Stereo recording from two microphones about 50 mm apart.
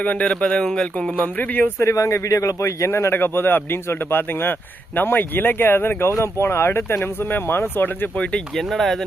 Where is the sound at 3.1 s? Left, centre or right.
Left.